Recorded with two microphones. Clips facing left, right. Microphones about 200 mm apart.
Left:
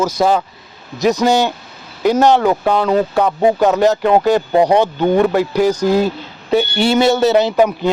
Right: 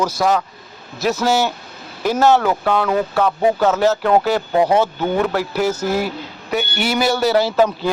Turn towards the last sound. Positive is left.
turn(degrees=15)  # may be behind; listen again after turning